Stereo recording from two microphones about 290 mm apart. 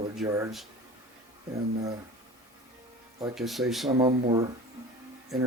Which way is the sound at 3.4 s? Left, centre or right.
Centre.